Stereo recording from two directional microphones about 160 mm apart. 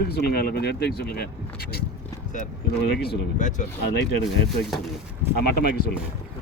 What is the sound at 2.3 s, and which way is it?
Speech, 55° left (ahead or behind).